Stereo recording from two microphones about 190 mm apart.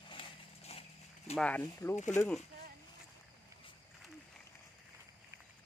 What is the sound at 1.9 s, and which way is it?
Speech, 40° left (ahead or behind).